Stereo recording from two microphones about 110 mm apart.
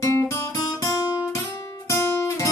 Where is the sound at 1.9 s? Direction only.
25° left (ahead or behind).